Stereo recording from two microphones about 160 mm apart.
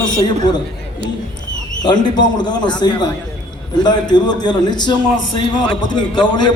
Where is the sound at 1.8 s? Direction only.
25° left (ahead or behind).